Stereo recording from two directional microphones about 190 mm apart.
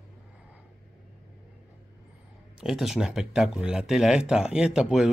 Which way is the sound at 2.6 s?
Centre (ahead or behind).